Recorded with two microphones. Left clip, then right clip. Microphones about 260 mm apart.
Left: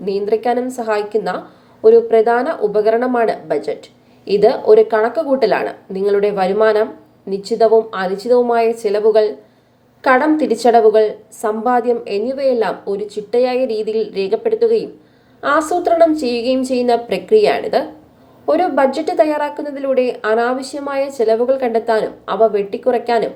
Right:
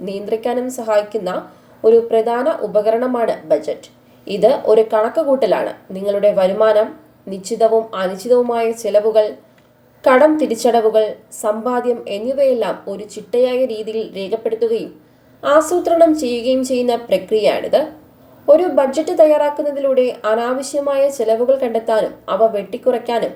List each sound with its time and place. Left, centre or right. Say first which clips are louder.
0.0 s a woman's voice: left 4 dB; centre